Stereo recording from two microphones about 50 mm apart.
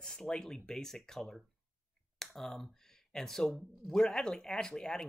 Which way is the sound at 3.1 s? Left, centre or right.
Centre.